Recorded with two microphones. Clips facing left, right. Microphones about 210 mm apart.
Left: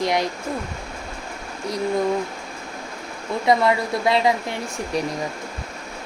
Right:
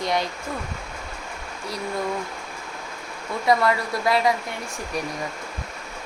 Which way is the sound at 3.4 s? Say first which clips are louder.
Left 2 dB; 20° left (ahead or behind).